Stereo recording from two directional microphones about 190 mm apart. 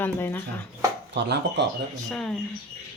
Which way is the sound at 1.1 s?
65° right (ahead or behind).